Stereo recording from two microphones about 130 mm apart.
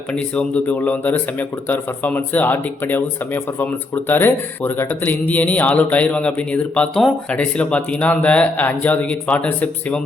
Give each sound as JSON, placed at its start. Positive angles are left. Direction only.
{"t": 0.1, "sound": "speech", "side_deg": 10}